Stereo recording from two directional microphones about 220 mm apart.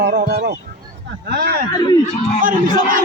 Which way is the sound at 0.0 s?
50° right (ahead or behind).